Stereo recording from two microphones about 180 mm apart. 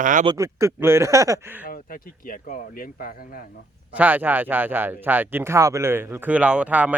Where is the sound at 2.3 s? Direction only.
50° left (ahead or behind).